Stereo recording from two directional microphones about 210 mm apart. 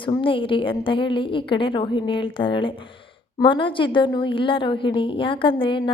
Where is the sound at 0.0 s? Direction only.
25° left (ahead or behind).